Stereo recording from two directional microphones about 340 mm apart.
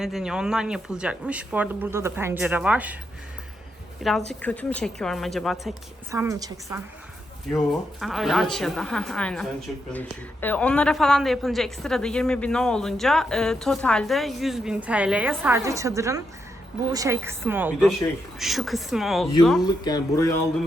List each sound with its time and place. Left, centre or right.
0.0 s a woman's voice: centre
4.3 s a woman's voice: centre
19.6 s speech: centre